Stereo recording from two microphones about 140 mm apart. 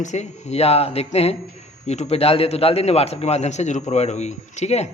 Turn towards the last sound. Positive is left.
turn(degrees=50)  # may be behind; listen again after turning